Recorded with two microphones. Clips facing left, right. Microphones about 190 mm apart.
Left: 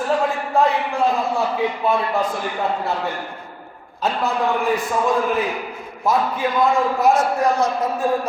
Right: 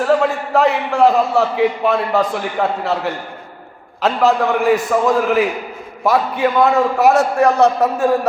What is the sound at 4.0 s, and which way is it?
Speech, 75° right (ahead or behind).